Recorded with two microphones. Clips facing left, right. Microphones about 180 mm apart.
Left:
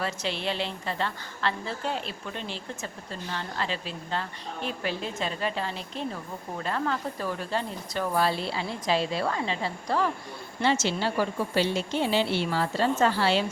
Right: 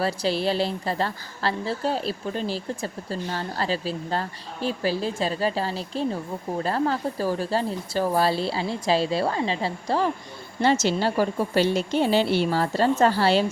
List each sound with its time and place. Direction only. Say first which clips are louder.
0.0 s a woman's voice: right 7 dB; 35° right (ahead or behind)
10.6 s a woman's voice: right 5 dB; 40° right (ahead or behind)